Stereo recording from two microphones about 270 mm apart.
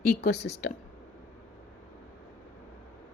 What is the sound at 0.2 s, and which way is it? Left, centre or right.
Speech, left.